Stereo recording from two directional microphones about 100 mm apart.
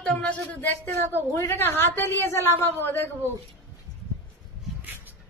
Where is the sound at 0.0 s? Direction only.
10° left (ahead or behind).